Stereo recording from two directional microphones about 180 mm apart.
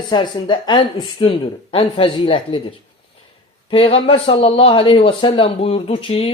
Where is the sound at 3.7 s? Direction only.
30° left (ahead or behind).